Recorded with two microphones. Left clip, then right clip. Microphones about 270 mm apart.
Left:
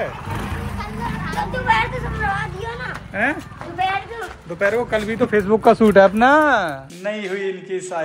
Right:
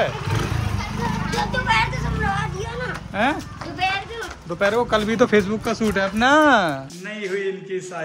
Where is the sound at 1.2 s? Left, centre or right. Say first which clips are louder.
Left 3 dB; left.